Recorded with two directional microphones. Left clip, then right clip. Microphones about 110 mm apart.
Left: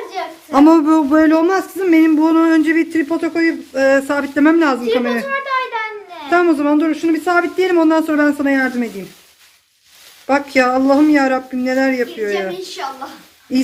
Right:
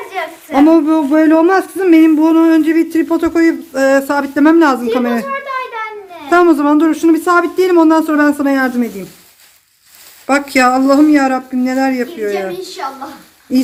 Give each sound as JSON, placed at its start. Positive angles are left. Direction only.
{"t": 0.5, "sound": "a sound", "side_deg": 20}
{"t": 1.3, "sound": "speech", "side_deg": -15}
{"t": 3.1, "sound": "speech", "side_deg": -25}
{"t": 4.9, "sound": "speech", "side_deg": -30}
{"t": 5.2, "sound": "a sound", "side_deg": 0}
{"t": 6.3, "sound": "speech", "side_deg": -20}
{"t": 7.3, "sound": "speech", "side_deg": -15}
{"t": 10.2, "sound": "speech", "side_deg": -5}